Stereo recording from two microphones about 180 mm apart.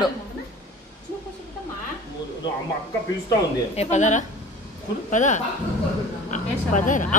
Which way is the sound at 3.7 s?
40° left (ahead or behind).